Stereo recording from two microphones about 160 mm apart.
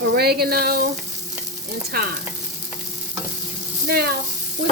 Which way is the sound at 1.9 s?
70° right (ahead or behind).